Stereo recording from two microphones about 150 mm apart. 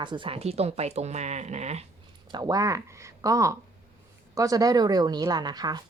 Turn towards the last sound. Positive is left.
turn(degrees=-25)  # may be behind; listen again after turning